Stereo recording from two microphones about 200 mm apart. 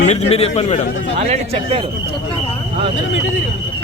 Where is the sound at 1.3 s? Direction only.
30° right (ahead or behind).